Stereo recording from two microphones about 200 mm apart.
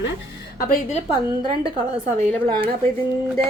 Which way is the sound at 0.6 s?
40° left (ahead or behind).